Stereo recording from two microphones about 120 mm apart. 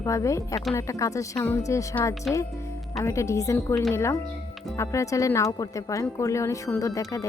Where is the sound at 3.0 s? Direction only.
25° left (ahead or behind).